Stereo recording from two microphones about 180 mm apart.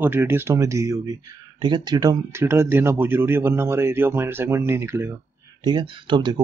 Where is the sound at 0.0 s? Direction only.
10° right (ahead or behind).